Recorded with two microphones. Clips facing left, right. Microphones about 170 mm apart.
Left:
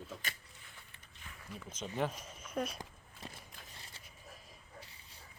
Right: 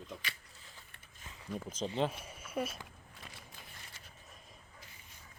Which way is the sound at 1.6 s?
35° right (ahead or behind).